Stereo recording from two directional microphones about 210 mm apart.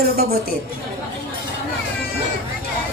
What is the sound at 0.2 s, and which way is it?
Speech, 45° right (ahead or behind).